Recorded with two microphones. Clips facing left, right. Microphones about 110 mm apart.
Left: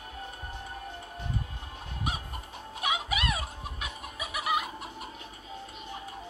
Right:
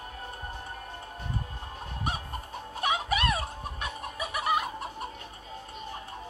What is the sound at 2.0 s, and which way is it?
Fowl, 40° right (ahead or behind).